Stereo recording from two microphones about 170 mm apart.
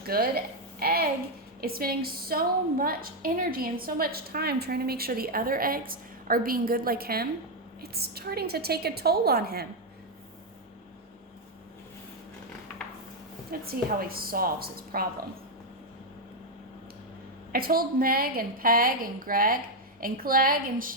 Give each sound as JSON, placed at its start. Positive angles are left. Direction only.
{"t": 0.1, "sound": "a woman's voice", "side_deg": -65}
{"t": 13.5, "sound": "a woman's voice", "side_deg": -60}
{"t": 17.5, "sound": "a woman's voice", "side_deg": -60}